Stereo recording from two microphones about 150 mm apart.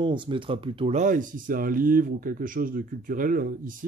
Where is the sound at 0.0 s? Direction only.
35° right (ahead or behind).